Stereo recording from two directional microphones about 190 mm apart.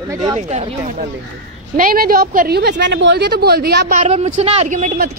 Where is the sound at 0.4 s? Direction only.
35° right (ahead or behind).